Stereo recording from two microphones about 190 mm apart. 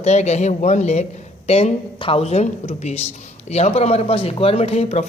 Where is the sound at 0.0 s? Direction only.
35° left (ahead or behind).